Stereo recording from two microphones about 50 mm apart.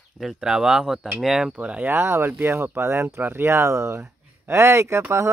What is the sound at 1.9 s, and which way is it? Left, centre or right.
Speech, right.